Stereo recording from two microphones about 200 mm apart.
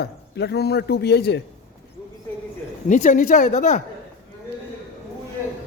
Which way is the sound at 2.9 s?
40° left (ahead or behind).